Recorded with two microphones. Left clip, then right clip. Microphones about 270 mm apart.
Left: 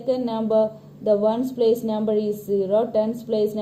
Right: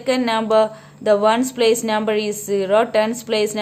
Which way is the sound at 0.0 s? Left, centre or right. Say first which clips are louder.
Right 5 dB; right.